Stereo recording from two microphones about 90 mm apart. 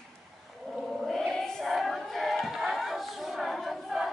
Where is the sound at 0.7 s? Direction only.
Centre (ahead or behind).